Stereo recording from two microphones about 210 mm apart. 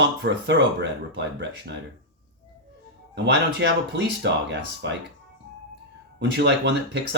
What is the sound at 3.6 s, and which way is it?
Speech, 55° right (ahead or behind).